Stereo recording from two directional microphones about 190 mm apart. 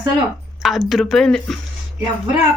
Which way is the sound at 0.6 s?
Centre (ahead or behind).